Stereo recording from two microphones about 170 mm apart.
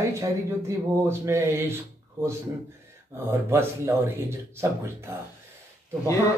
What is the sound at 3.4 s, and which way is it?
Speech, 15° right (ahead or behind).